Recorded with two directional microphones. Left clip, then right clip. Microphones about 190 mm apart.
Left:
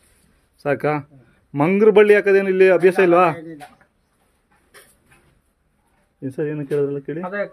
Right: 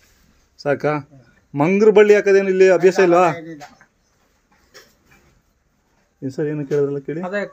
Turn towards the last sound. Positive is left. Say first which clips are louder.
# right 1 dB
turn(degrees=-45)  # may be behind; listen again after turning